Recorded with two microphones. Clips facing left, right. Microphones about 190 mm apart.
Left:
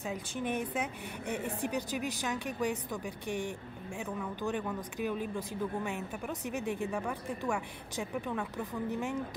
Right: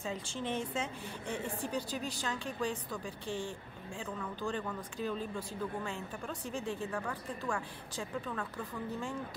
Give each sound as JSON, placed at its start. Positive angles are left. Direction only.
{"t": 0.0, "sound": "a woman's voice", "side_deg": 10}